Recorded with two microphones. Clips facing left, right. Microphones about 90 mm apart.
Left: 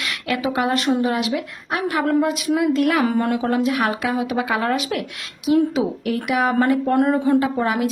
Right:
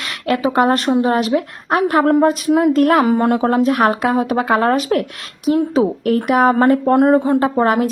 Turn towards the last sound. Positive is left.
turn(degrees=-40)  # may be behind; listen again after turning